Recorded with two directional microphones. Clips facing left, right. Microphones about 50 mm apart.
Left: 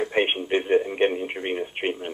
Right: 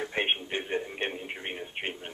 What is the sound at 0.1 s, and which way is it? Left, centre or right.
Speech, left.